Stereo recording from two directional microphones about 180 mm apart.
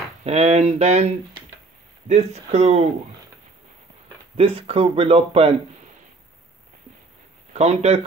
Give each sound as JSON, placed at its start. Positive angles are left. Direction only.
{"t": 0.2, "sound": "speech", "side_deg": -35}
{"t": 4.4, "sound": "speech", "side_deg": -30}
{"t": 7.5, "sound": "speech", "side_deg": -35}